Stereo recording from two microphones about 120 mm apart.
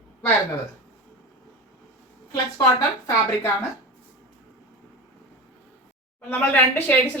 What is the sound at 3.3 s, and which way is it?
Speech, 25° left (ahead or behind).